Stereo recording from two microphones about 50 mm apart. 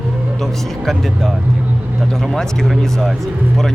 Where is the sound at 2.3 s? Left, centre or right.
Centre.